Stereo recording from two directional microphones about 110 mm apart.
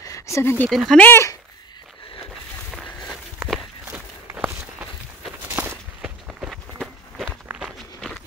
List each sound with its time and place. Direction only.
0.0 s a sound: 30° left (ahead or behind)
0.7 s speech: centre (ahead or behind)
1.0 s speech: 20° left (ahead or behind)
3.4 s walk: 5° right (ahead or behind)
4.3 s walk: 20° right (ahead or behind)
6.0 s walk: 10° right (ahead or behind)
7.4 s walk: 10° right (ahead or behind)